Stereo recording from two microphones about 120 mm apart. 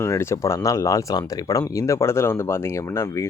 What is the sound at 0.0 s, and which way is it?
Speech, 20° left (ahead or behind).